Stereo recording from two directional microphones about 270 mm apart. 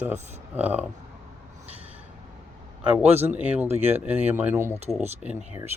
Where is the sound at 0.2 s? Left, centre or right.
Right.